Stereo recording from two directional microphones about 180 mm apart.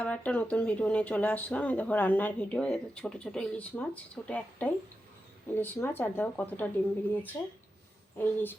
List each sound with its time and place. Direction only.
0.0 s speech: 5° left (ahead or behind)